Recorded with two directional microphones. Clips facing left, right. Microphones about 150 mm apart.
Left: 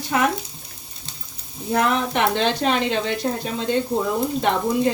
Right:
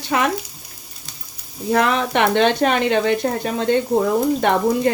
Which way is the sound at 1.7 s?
80° right.